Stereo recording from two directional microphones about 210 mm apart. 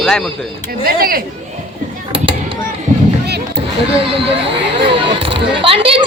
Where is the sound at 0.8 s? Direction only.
45° right (ahead or behind).